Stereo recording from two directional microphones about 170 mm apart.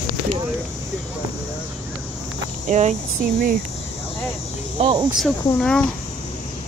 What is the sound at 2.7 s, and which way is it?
Speech, 45° right (ahead or behind).